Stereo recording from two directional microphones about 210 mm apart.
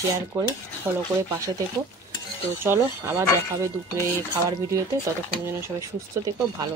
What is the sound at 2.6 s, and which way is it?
Speech, 10° right (ahead or behind).